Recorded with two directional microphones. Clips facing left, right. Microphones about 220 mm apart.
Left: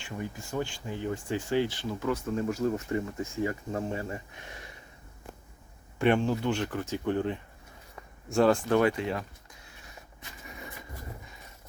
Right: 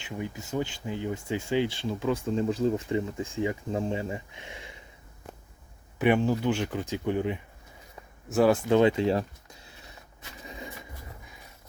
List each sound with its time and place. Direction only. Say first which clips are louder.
0.0 s speech: right 2 dB; 20° right (ahead or behind)
1.4 s speech: right 1 dB; 25° right (ahead or behind)
6.0 s speech: right 1 dB; 10° right (ahead or behind)
8.7 s speech: right 4 dB; 25° right (ahead or behind)
10.4 s a sound: right 4 dB; 20° right (ahead or behind)